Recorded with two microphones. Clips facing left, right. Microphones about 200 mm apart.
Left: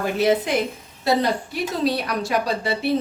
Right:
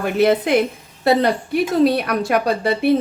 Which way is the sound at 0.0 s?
60° right (ahead or behind).